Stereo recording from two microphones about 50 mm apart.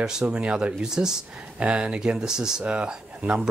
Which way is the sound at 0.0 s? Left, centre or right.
Centre.